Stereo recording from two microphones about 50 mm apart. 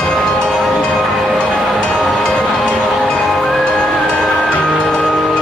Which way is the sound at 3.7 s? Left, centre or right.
Centre.